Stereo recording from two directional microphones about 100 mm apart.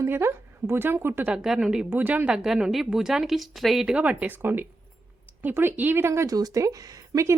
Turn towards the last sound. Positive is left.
turn(degrees=-35)  # may be behind; listen again after turning